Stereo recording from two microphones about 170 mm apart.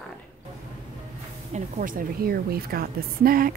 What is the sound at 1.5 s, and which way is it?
A woman's voice, 50° right (ahead or behind).